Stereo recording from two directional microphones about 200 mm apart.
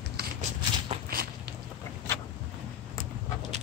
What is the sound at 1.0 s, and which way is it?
Walk, 50° right (ahead or behind).